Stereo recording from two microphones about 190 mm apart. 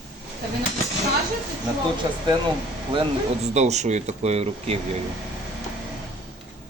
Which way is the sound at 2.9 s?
30° right (ahead or behind).